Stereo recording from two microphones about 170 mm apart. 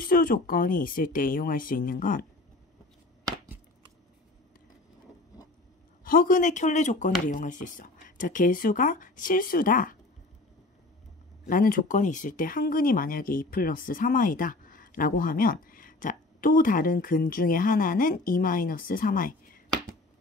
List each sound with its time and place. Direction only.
0.0 s speech: 55° left (ahead or behind)
6.0 s speech: 55° left (ahead or behind)
11.4 s speech: 55° left (ahead or behind)